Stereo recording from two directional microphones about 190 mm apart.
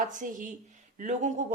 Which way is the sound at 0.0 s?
40° right (ahead or behind).